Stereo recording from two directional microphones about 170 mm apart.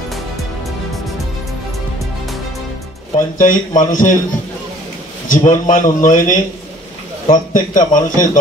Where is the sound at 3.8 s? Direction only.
50° left (ahead or behind).